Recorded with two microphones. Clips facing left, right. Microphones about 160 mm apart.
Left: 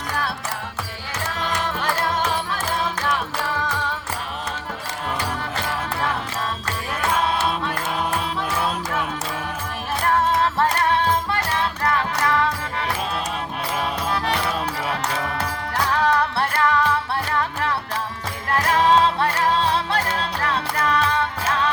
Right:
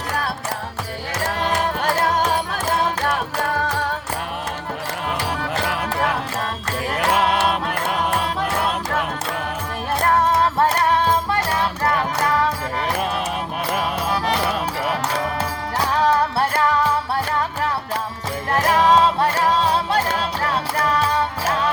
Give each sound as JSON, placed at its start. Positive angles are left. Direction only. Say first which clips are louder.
{"t": 1.3, "sound": "music", "louder": "right 4 dB", "side_deg": -50}
{"t": 7.1, "sound": "music", "louder": "right 3 dB", "side_deg": -70}
{"t": 8.5, "sound": "music", "louder": "right 2 dB", "side_deg": -60}
{"t": 10.0, "sound": "music", "louder": "right 2 dB", "side_deg": -40}
{"t": 15.9, "sound": "music", "louder": "right 2 dB", "side_deg": -35}
{"t": 18.9, "sound": "music", "louder": "even", "side_deg": -40}